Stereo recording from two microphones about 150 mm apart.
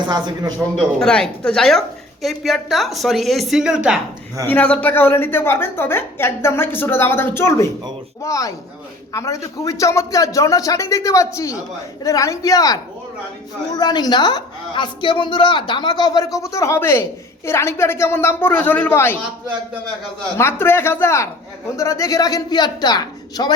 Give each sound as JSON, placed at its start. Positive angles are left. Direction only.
{"t": 0.1, "sound": "speech", "side_deg": -30}
{"t": 0.8, "sound": "a woman's voice", "side_deg": 5}
{"t": 4.4, "sound": "a woman's voice", "side_deg": 10}
{"t": 20.4, "sound": "a woman's voice", "side_deg": 15}